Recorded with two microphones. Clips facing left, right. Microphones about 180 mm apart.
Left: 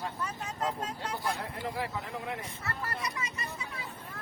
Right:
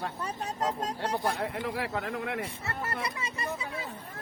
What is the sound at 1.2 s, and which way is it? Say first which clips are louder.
Speech: right 4 dB; 65° right (ahead or behind).